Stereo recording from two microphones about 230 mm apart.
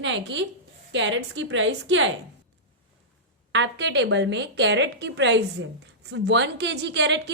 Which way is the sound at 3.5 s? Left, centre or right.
Right.